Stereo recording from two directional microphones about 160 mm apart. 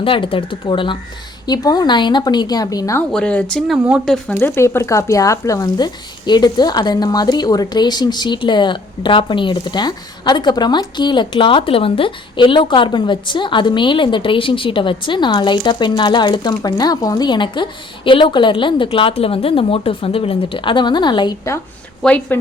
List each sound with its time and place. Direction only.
0.0 s speech: 35° left (ahead or behind)
3.1 s speech: 5° left (ahead or behind)
4.4 s speech: 15° left (ahead or behind)
22.0 s a woman's voice: 10° left (ahead or behind)